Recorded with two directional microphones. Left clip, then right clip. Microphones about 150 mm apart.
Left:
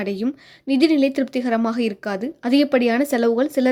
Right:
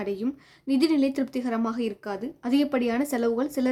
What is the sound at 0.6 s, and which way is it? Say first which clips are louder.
Speech: left 6 dB; 15° left (ahead or behind).